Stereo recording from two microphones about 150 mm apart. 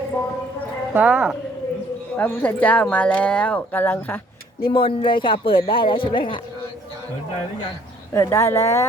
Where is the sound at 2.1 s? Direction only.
10° left (ahead or behind).